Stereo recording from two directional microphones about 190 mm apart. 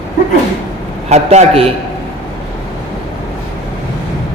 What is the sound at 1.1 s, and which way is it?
Speech, 35° right (ahead or behind).